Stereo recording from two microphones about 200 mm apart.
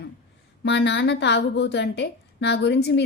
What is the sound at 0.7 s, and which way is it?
A woman's voice, 60° left (ahead or behind).